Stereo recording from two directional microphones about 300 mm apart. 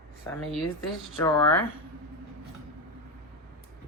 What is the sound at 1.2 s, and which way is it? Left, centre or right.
Speech, centre.